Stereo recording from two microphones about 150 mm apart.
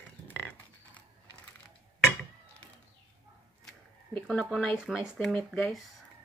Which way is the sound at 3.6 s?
10° left (ahead or behind).